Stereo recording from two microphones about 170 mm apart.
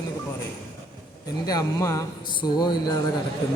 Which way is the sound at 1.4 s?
20° left (ahead or behind).